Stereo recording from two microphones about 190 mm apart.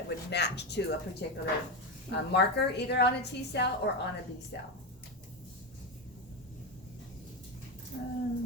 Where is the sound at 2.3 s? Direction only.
60° left (ahead or behind).